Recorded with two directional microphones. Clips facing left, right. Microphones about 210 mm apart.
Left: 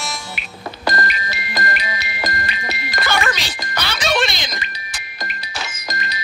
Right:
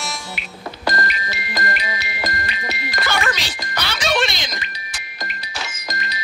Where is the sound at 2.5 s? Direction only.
55° left (ahead or behind).